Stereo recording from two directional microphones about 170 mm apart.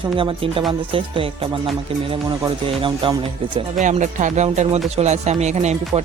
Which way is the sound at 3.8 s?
45° right (ahead or behind).